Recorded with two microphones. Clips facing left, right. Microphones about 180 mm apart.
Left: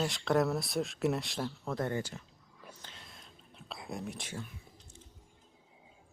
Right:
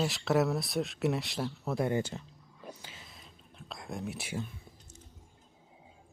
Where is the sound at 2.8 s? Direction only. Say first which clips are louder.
Right 2 dB; 5° right (ahead or behind).